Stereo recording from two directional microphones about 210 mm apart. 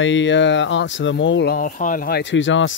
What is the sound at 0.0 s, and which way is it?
Speech, 60° left (ahead or behind).